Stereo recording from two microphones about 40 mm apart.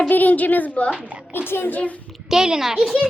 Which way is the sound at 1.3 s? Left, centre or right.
Left.